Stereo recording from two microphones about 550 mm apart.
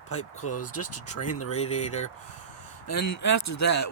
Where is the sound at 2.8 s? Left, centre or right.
Left.